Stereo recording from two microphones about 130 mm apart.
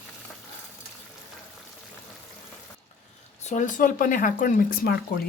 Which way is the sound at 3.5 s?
75° left (ahead or behind).